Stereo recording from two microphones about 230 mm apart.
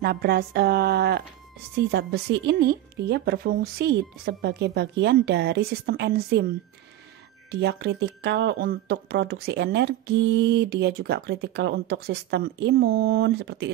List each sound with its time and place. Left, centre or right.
0.0 s speech: right
7.6 s speech: right